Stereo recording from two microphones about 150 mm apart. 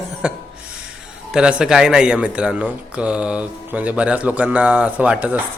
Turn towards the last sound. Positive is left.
turn(degrees=-10)  # may be behind; listen again after turning